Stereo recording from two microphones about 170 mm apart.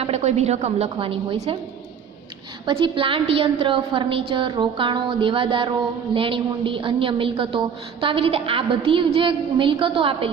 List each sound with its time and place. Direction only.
0.0 s a woman's voice: 40° right (ahead or behind)
2.6 s a woman's voice: 30° right (ahead or behind)